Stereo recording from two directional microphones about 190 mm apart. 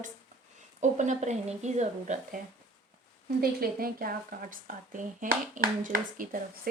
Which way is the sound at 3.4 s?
50° right (ahead or behind).